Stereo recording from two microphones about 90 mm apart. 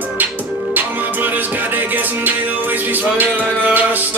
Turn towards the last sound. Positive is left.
turn(degrees=-20)  # may be behind; listen again after turning